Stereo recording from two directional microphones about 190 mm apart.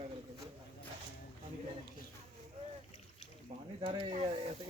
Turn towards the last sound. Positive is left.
turn(degrees=-30)  # may be behind; listen again after turning